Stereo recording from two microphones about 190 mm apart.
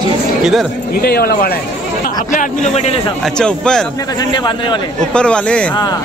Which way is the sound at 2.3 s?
35° left (ahead or behind).